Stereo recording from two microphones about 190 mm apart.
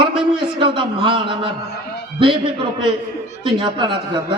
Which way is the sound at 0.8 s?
25° right (ahead or behind).